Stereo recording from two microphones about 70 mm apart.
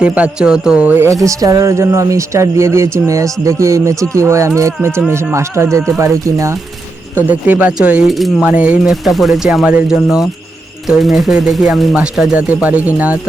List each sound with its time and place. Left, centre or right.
0.0 s speech: centre
1.0 s speech: right
7.3 s speech: right
8.0 s speech: centre
8.4 s speech: centre
8.9 s speech: centre
12.4 s speech: centre